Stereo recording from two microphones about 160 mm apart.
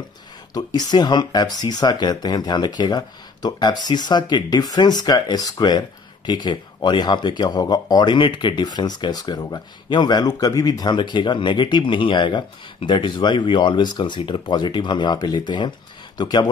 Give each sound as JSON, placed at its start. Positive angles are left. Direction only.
{"t": 0.6, "sound": "speech", "side_deg": 25}